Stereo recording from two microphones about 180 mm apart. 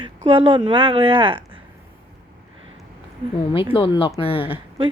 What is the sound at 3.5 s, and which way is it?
A woman's voice, 30° left (ahead or behind).